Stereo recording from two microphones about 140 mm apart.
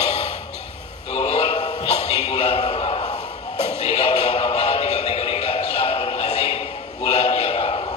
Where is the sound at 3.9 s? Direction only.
50° left (ahead or behind).